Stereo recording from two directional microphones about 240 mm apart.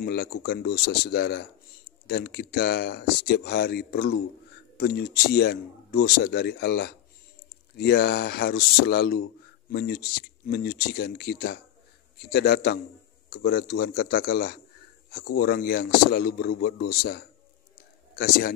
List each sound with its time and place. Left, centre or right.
0.0 s a man's voice: left